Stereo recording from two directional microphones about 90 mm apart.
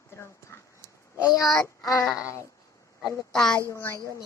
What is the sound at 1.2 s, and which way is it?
Speech, 40° left (ahead or behind).